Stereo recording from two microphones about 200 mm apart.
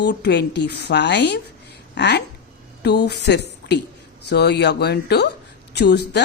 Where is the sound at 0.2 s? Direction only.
60° left (ahead or behind).